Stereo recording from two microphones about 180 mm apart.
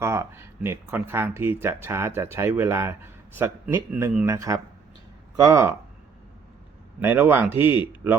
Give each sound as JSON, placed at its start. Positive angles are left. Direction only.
{"t": 0.0, "sound": "speech", "side_deg": -15}
{"t": 7.0, "sound": "speech", "side_deg": -10}